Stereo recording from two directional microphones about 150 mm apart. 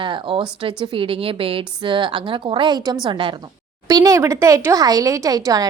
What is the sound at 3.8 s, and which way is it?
Speech, 20° right (ahead or behind).